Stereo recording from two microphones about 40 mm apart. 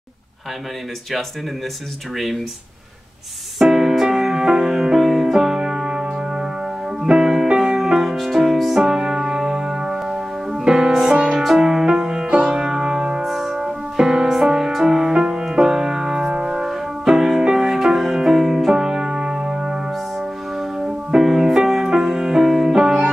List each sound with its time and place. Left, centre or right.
3.5 s music: centre
10.5 s music: right
11.3 s music: centre
13.2 s keyboard: centre
13.6 s music: centre
16.3 s music: right
16.6 s music: centre